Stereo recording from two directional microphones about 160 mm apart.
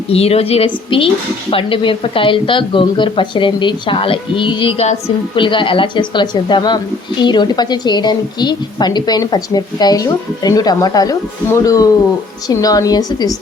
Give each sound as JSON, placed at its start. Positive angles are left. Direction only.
{"t": 0.1, "sound": "a woman's voice", "side_deg": 40}